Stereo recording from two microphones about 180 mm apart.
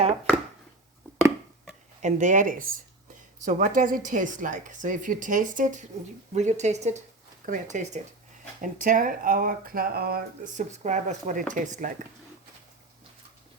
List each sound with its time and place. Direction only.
2.0 s speech: 40° right (ahead or behind)